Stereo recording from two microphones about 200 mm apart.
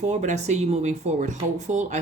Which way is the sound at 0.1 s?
35° right (ahead or behind).